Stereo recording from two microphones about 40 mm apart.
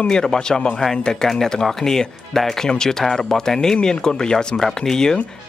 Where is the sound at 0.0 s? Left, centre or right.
Centre.